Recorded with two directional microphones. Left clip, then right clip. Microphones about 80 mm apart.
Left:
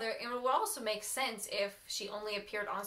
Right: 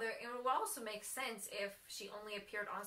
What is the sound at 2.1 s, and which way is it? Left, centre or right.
Speech, centre.